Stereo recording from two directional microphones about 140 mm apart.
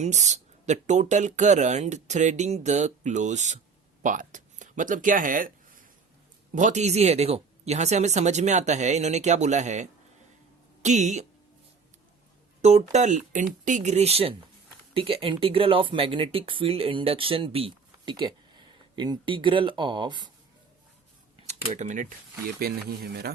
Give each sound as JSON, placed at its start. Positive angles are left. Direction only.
{"t": 0.0, "sound": "speech", "side_deg": -55}
{"t": 4.0, "sound": "a sound", "side_deg": -65}
{"t": 6.5, "sound": "speech", "side_deg": -65}
{"t": 12.6, "sound": "speech", "side_deg": -55}
{"t": 21.3, "sound": "typing", "side_deg": -50}
{"t": 22.6, "sound": "speech", "side_deg": -90}